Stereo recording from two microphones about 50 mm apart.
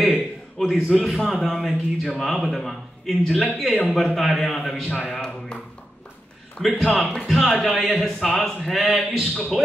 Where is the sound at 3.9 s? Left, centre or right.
Centre.